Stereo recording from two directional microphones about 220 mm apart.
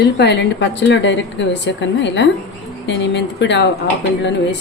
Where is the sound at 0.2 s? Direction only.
50° left (ahead or behind).